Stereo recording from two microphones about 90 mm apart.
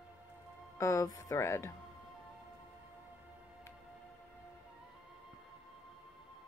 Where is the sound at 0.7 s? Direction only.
35° left (ahead or behind).